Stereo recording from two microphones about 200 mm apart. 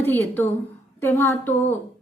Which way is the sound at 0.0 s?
10° left (ahead or behind).